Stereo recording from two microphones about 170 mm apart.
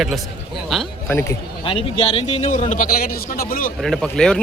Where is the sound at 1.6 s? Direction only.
30° left (ahead or behind).